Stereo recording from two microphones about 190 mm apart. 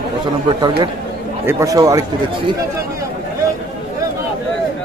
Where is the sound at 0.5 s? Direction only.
25° right (ahead or behind).